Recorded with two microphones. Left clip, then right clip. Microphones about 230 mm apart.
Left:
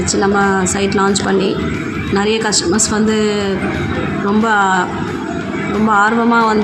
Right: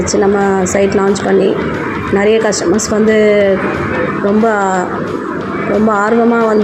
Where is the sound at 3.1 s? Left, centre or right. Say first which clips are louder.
Right 7 dB; centre.